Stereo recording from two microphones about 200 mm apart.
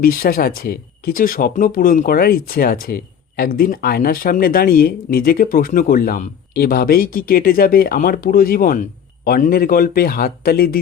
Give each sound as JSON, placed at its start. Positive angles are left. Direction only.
{"t": 0.0, "sound": "speech", "side_deg": 45}